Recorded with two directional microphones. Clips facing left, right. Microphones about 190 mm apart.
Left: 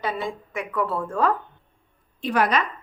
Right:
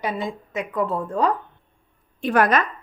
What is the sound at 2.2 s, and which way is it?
Speech, 50° right (ahead or behind).